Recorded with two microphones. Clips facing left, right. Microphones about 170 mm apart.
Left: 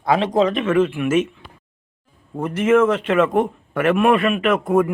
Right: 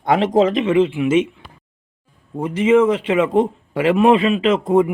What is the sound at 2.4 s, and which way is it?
Speech, 10° right (ahead or behind).